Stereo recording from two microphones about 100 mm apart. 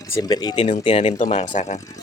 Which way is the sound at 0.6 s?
70° left (ahead or behind).